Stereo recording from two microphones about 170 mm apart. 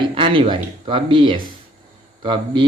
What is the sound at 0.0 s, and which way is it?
A man's voice, 30° right (ahead or behind).